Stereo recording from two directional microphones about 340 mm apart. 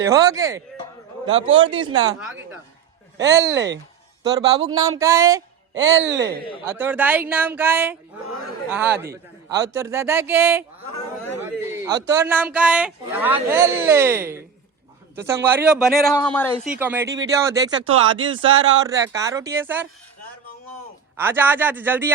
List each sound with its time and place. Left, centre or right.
0.0 s speech: centre
3.3 s speech: right
4.2 s speech: centre
11.3 s a sound: centre
12.0 s speech: centre
16.7 s speech: centre
17.9 s speech: right
18.9 s speech: centre
21.2 s speech: centre